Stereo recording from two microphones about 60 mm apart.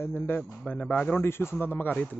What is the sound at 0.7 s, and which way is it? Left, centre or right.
Speech, left.